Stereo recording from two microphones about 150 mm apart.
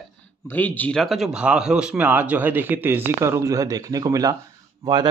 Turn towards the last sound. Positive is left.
turn(degrees=-25)  # may be behind; listen again after turning